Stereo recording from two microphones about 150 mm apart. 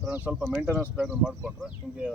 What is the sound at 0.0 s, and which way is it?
Speech, 5° right (ahead or behind).